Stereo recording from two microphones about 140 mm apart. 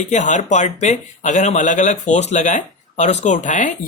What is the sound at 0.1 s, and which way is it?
Speech, 60° left (ahead or behind).